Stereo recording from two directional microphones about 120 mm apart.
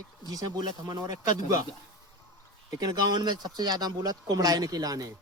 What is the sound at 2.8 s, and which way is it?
Speech, 35° right (ahead or behind).